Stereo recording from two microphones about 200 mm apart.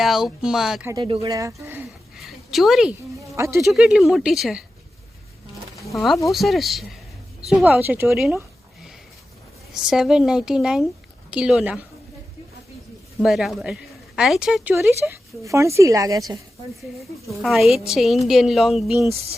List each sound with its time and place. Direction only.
0.0 s a woman's voice: centre (ahead or behind)
0.9 s a woman's voice: 20° right (ahead or behind); by 3.3 s centre (ahead or behind)
3.3 s speech: 15° right (ahead or behind)
3.6 s a woman's voice: centre (ahead or behind)
5.8 s a woman's voice: centre (ahead or behind)
9.7 s a woman's voice: centre (ahead or behind)
13.2 s a woman's voice: centre (ahead or behind); by 16.2 s 15° right (ahead or behind)
17.0 s a woman's voice: centre (ahead or behind)